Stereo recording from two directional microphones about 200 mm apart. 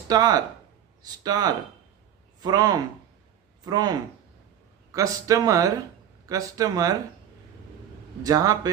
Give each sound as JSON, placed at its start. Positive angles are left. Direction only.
{"t": 0.1, "sound": "speech", "side_deg": -20}
{"t": 8.2, "sound": "speech", "side_deg": -20}